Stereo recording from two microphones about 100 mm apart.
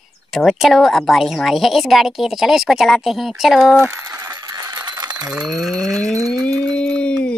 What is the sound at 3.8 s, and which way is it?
Coin, 30° right (ahead or behind).